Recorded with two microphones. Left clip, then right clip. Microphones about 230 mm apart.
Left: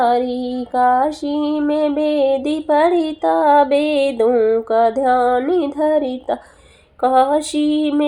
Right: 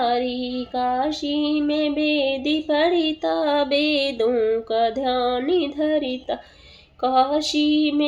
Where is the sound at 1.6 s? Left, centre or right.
Centre.